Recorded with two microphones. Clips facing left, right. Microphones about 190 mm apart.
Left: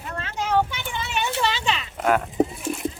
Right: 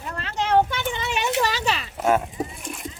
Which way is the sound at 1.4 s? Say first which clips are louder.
Right 1 dB; 40° right (ahead or behind).